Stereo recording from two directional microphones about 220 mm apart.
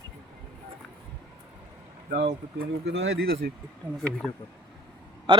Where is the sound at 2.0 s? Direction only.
40° right (ahead or behind).